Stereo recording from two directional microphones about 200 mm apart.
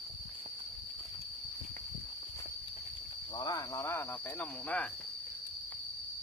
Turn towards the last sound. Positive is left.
turn(degrees=5)  # may be behind; listen again after turning